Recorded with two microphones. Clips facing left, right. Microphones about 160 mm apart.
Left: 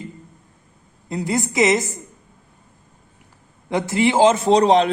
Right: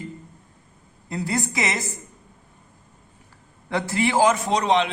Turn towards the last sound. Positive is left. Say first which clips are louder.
# left 6 dB
turn(degrees=35)  # may be behind; listen again after turning